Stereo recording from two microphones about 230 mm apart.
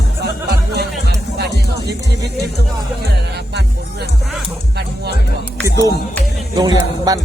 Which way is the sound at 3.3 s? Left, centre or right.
Right.